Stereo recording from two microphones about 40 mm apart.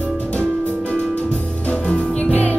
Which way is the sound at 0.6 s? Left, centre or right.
Left.